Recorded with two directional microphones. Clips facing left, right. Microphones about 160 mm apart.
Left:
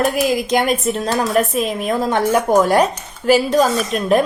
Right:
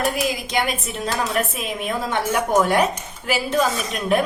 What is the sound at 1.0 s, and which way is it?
A woman's voice, 40° left (ahead or behind).